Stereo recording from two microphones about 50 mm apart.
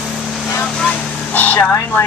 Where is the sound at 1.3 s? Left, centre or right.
Left.